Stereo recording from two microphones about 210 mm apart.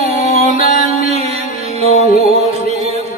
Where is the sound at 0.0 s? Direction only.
30° right (ahead or behind).